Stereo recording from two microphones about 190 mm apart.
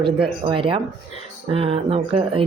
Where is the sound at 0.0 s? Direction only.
25° right (ahead or behind).